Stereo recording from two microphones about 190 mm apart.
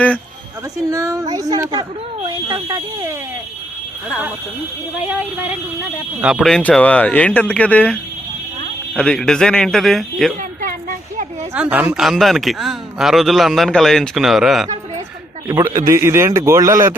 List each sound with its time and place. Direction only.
0.9 s speech: 15° right (ahead or behind)
5.0 s speech: 10° right (ahead or behind)
6.3 s speech: 5° left (ahead or behind)
9.0 s speech: centre (ahead or behind)
10.6 s a sound: 45° right (ahead or behind)
11.5 s speech: 10° right (ahead or behind)
15.4 s speech: 15° right (ahead or behind)